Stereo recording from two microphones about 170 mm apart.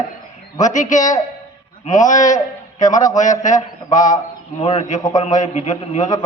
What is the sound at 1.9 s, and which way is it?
A man's voice, 45° left (ahead or behind).